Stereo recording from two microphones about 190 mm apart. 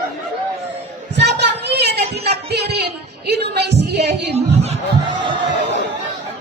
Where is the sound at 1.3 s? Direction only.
60° right (ahead or behind).